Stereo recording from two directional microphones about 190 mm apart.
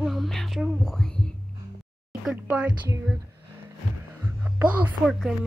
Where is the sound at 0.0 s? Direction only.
Centre (ahead or behind).